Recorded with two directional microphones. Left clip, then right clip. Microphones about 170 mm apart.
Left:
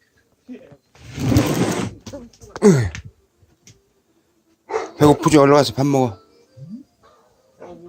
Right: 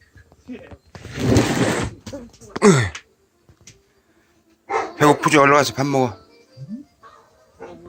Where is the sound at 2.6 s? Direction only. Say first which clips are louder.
Even; 30° left (ahead or behind).